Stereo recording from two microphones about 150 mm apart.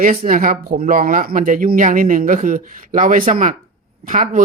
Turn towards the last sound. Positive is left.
turn(degrees=-60)  # may be behind; listen again after turning